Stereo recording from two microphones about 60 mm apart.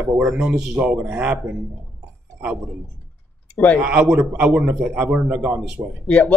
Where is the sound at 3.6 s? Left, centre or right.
Left.